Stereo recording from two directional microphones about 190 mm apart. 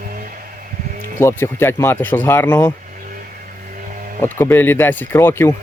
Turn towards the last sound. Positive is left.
turn(degrees=10)  # may be behind; listen again after turning